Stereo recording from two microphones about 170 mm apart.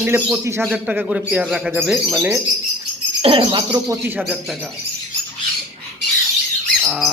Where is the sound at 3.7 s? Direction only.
15° right (ahead or behind).